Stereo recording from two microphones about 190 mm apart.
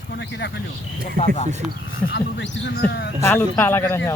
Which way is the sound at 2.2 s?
70° left (ahead or behind).